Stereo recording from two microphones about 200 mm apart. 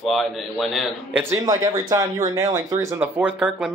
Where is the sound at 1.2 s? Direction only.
15° right (ahead or behind).